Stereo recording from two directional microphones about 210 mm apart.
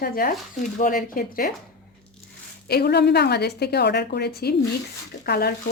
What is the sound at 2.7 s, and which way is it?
Speech, 50° left (ahead or behind).